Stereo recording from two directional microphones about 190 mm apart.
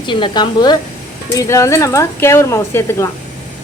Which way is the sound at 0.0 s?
25° left (ahead or behind).